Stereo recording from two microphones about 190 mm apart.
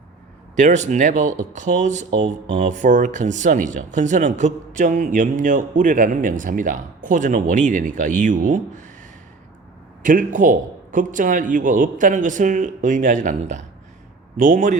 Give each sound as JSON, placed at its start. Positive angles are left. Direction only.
{"t": 0.5, "sound": "speech", "side_deg": -40}
{"t": 10.0, "sound": "a man's voice", "side_deg": -45}